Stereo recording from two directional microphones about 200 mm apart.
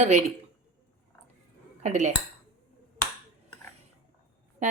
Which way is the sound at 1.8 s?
35° right (ahead or behind).